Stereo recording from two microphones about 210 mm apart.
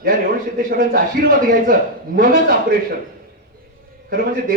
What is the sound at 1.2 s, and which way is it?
A man's voice, 45° right (ahead or behind).